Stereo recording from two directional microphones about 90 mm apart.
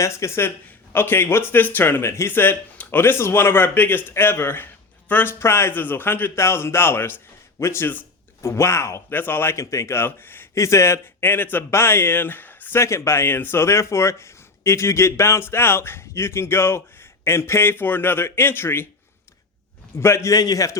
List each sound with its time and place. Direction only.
0.0 s speech: 30° left (ahead or behind)
20.0 s speech: 30° left (ahead or behind)
20.3 s a man's voice: 45° left (ahead or behind)